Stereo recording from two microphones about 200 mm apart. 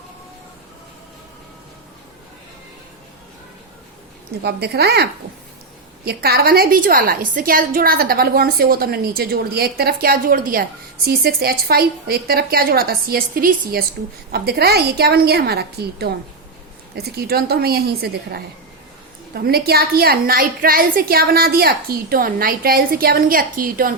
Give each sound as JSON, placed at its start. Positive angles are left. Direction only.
{"t": 4.4, "sound": "a woman's voice", "side_deg": -55}
{"t": 6.1, "sound": "a woman's voice", "side_deg": -50}